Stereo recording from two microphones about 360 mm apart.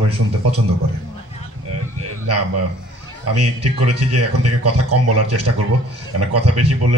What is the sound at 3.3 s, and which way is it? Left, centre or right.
A man's voice, right.